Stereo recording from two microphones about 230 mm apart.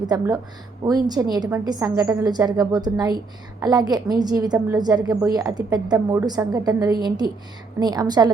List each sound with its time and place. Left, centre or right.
0.9 s a woman's voice: centre